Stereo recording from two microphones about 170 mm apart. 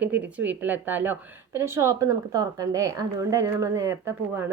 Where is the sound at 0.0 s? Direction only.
10° right (ahead or behind).